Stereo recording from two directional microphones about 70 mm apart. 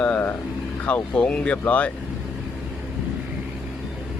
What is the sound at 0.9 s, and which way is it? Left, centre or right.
Speech, centre.